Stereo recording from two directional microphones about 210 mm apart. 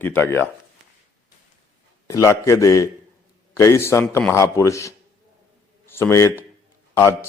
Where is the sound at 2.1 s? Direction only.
15° left (ahead or behind).